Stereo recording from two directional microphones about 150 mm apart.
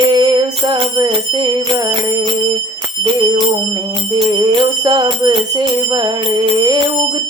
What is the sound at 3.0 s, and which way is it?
Bell, 30° right (ahead or behind).